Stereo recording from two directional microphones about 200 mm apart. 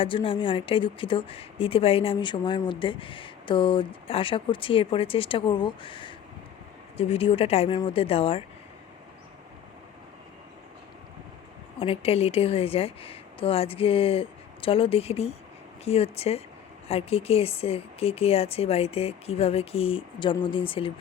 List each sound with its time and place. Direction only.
0.0 s a woman's voice: 25° left (ahead or behind)
11.8 s a woman's voice: 30° left (ahead or behind)